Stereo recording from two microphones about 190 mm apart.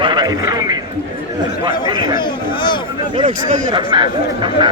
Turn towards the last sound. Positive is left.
turn(degrees=-25)  # may be behind; listen again after turning